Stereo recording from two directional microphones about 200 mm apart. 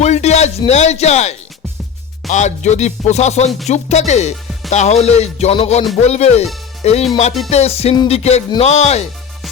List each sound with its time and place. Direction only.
0.0 s speech: 35° left (ahead or behind)